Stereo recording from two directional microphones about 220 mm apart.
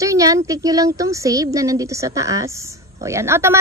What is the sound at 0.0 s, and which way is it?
A woman's voice, 15° right (ahead or behind).